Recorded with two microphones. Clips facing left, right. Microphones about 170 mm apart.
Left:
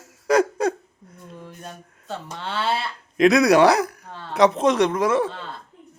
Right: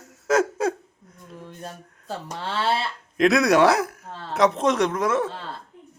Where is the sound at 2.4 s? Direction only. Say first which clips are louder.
Even; 30° right (ahead or behind).